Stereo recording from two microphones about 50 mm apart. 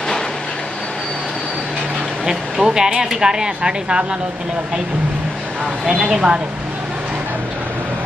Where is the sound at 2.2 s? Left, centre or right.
Centre.